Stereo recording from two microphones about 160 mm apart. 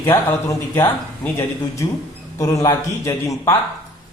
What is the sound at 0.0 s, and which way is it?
Speech, 15° left (ahead or behind).